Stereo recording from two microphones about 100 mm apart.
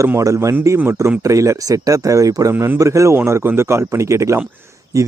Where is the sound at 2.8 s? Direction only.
30° right (ahead or behind).